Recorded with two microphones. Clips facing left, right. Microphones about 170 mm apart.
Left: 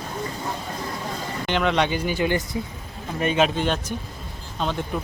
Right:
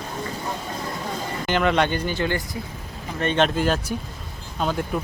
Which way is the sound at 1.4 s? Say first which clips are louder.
Right 1 dB; centre (ahead or behind).